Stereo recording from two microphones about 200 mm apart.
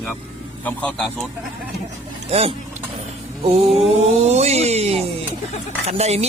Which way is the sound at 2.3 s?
30° right (ahead or behind).